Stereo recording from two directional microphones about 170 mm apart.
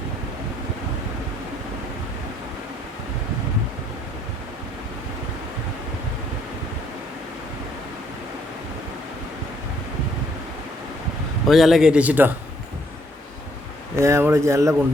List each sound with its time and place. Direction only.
11.4 s a man's voice: centre (ahead or behind)
13.9 s speech: 15° right (ahead or behind)